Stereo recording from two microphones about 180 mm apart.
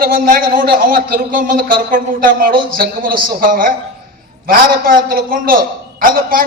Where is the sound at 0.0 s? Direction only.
50° right (ahead or behind).